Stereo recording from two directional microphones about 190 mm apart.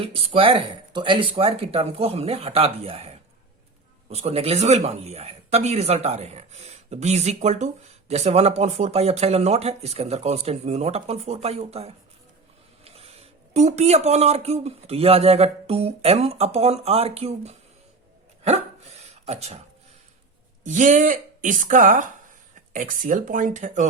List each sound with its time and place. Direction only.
0.1 s speech: 30° right (ahead or behind)
13.5 s speech: 35° right (ahead or behind)
18.4 s dog: 35° right (ahead or behind)
20.7 s speech: 40° right (ahead or behind)